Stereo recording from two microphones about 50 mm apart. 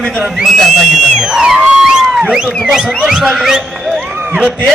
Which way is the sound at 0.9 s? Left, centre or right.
Centre.